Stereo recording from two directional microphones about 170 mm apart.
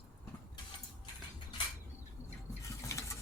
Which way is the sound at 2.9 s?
20° left (ahead or behind).